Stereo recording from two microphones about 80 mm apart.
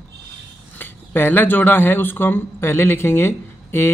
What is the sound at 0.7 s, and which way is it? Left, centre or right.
Speech, left.